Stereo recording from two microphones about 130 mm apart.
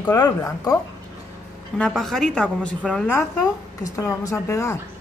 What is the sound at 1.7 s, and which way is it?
Speech, 5° left (ahead or behind).